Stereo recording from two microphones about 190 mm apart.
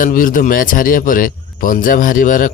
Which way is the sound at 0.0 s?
45° left (ahead or behind).